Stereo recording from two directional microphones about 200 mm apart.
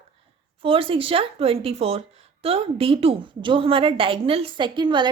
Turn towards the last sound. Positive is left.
turn(degrees=-25)  # may be behind; listen again after turning